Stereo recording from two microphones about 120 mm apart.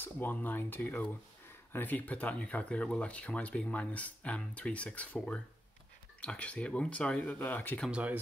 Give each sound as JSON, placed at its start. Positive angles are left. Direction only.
{"t": 0.0, "sound": "speech", "side_deg": 15}
{"t": 7.9, "sound": "speech", "side_deg": -10}